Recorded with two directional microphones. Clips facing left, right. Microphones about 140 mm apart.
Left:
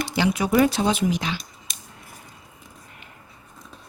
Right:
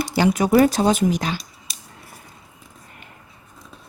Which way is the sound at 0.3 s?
45° right (ahead or behind).